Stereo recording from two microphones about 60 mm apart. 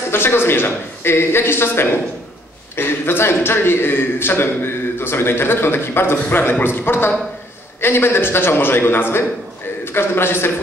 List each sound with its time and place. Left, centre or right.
0.1 s a man's voice: left